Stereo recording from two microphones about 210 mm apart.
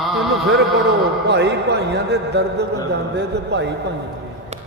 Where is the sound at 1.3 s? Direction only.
55° right (ahead or behind).